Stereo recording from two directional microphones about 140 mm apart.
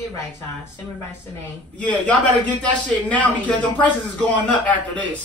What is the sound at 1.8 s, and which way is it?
A man's voice, 10° left (ahead or behind).